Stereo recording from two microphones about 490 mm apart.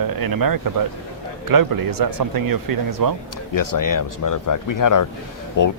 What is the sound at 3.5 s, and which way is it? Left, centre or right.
Speech, left.